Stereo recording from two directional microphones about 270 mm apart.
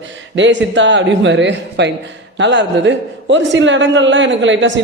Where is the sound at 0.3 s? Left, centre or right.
Right.